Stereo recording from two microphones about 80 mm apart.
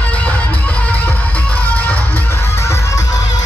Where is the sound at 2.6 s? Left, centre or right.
Left.